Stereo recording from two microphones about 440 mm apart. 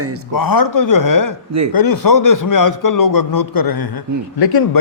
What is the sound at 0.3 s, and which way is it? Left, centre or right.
A man's voice, left.